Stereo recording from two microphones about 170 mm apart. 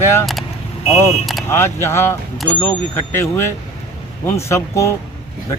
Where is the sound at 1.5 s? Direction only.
15° left (ahead or behind).